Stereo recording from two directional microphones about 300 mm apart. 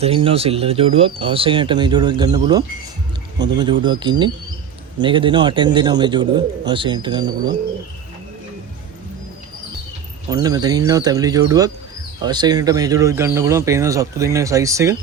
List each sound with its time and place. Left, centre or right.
0.0 s speech: centre
10.2 s speech: centre